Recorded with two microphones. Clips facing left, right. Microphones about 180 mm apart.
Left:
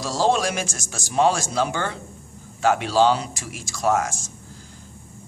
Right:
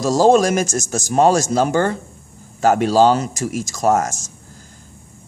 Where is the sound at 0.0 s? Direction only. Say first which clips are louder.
Right 8 dB; 45° right (ahead or behind).